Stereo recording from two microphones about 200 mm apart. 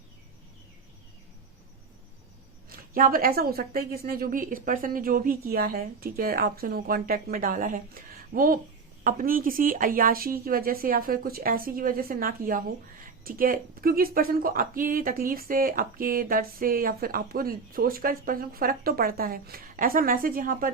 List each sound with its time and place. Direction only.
2.6 s speech: 45° right (ahead or behind)